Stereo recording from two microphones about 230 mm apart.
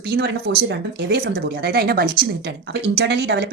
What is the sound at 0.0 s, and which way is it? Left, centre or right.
A woman's voice, right.